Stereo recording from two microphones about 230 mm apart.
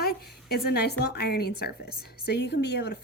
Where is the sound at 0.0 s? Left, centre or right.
Left.